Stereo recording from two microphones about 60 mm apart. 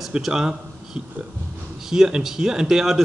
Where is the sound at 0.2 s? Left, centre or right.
Centre.